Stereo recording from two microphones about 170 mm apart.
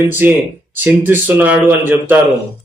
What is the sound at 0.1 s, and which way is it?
A man's voice, 10° right (ahead or behind).